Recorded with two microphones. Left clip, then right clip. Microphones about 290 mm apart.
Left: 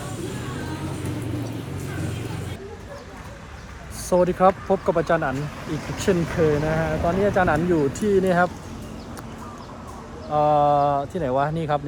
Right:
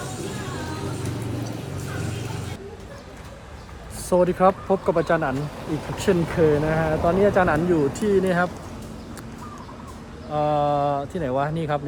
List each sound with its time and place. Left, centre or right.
4.1 s speech: centre
10.3 s speech: centre